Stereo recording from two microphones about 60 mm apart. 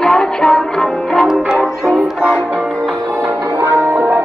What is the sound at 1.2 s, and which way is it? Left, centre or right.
Music, centre.